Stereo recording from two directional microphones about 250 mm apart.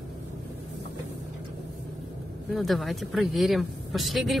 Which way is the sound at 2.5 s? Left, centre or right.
Centre.